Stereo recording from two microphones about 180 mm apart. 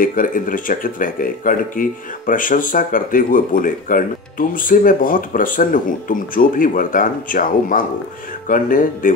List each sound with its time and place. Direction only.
0.0 s speech: 50° left (ahead or behind)